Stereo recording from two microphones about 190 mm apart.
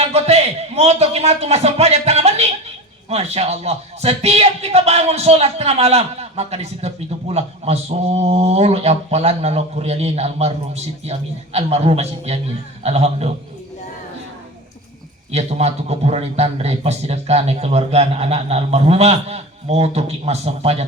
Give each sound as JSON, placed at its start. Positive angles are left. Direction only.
{"t": 0.0, "sound": "a man's voice", "side_deg": -35}
{"t": 15.3, "sound": "speech", "side_deg": -35}